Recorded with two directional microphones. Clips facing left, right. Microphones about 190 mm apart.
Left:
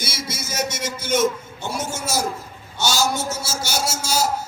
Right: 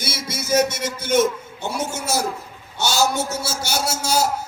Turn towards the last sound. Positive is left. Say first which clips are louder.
# right 2 dB
turn(degrees=-60)  # may be behind; listen again after turning